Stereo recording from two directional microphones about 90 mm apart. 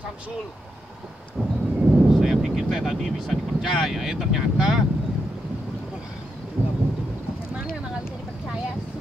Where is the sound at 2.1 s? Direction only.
Centre (ahead or behind).